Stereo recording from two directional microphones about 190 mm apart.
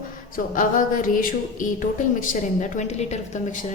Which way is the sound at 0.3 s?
45° left (ahead or behind).